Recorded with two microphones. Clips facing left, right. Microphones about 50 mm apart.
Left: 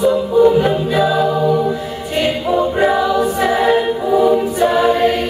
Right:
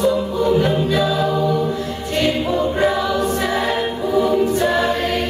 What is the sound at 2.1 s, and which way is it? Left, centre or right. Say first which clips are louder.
Choir: left 3 dB; centre.